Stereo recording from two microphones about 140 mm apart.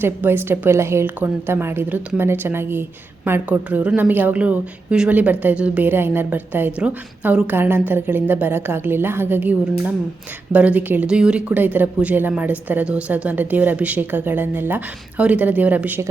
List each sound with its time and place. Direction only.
0.0 s a woman's voice: 15° right (ahead or behind)